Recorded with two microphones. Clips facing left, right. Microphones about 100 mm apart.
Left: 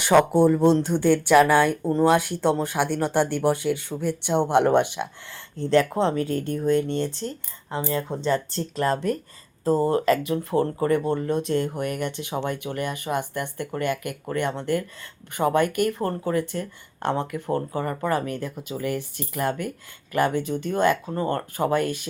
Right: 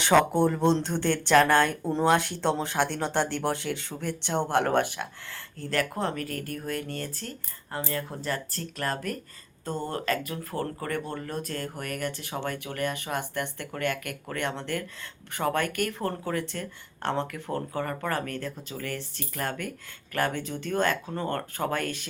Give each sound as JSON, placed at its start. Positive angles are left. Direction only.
{"t": 0.0, "sound": "speech", "side_deg": 15}